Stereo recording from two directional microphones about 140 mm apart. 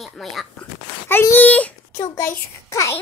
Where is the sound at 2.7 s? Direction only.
20° left (ahead or behind).